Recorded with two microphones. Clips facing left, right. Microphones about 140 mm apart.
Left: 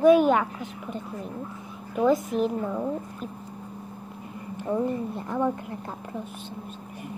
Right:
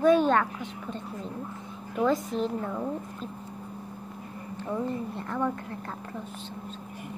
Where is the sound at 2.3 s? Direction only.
10° left (ahead or behind).